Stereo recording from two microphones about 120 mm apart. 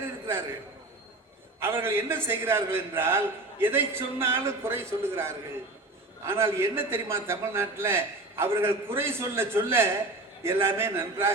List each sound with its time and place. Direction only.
1.5 s a man's voice: 20° right (ahead or behind)